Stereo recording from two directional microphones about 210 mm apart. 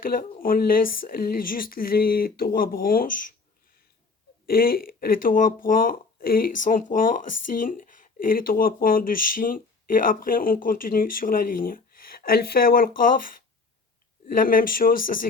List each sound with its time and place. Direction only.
0.0 s speech: 45° left (ahead or behind)
4.4 s speech: 45° left (ahead or behind)
14.4 s speech: 45° left (ahead or behind)